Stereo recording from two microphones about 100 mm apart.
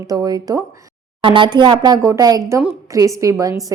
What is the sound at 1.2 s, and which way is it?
A woman's voice, 55° right (ahead or behind).